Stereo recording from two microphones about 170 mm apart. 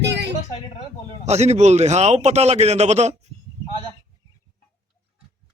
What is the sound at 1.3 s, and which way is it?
A man's voice, 40° right (ahead or behind).